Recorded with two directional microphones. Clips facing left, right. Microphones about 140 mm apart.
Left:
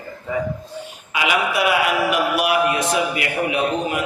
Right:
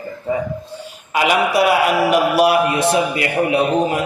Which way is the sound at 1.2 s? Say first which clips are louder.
Right 4 dB; 35° right (ahead or behind).